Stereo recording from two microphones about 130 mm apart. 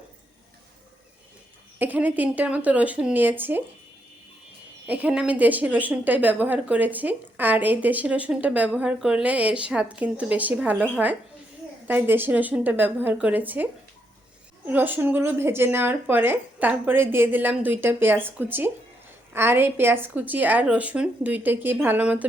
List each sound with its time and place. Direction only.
1.8 s speech: 15° right (ahead or behind)
4.9 s speech: 10° right (ahead or behind)
14.7 s speech: 15° right (ahead or behind)